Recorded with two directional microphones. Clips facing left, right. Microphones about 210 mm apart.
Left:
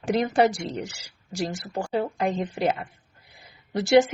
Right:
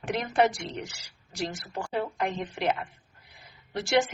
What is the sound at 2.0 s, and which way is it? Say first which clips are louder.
Speech: left 5 dB; 30° left (ahead or behind).